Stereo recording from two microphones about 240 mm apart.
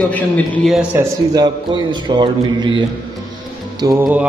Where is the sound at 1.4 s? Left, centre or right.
Centre.